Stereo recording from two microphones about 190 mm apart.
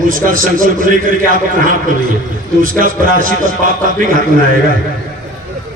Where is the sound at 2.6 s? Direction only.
45° right (ahead or behind).